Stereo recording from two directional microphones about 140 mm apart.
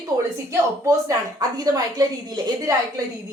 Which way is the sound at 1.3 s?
25° right (ahead or behind).